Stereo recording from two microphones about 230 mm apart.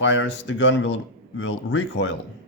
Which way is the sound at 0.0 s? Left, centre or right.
Left.